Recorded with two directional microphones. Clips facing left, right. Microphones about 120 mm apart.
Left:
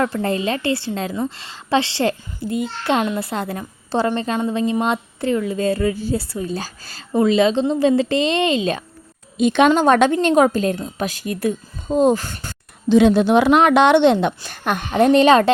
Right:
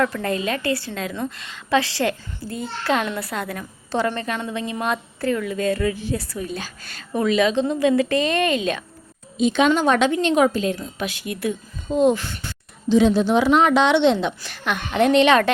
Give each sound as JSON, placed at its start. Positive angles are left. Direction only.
{"t": 0.0, "sound": "a child's voice", "side_deg": 30}
{"t": 9.4, "sound": "a woman's voice", "side_deg": 60}
{"t": 9.6, "sound": "a woman's voice", "side_deg": 45}
{"t": 12.9, "sound": "a woman's voice", "side_deg": 60}